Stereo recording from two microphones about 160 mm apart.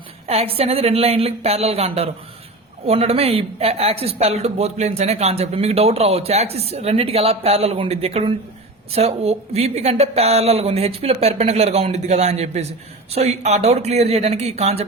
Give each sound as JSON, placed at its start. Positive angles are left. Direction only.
{"t": 0.3, "sound": "speech", "side_deg": -40}